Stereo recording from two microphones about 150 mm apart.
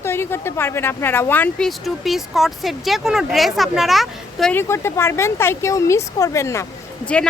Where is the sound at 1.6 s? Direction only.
Centre (ahead or behind).